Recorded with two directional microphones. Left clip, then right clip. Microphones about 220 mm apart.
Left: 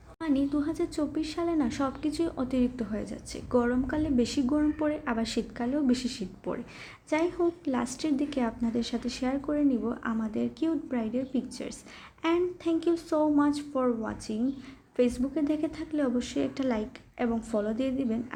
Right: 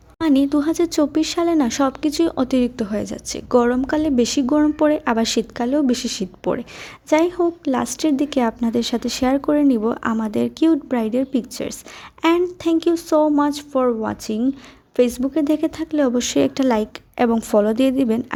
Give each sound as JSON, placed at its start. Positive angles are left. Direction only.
{"t": 0.2, "sound": "speech", "side_deg": -50}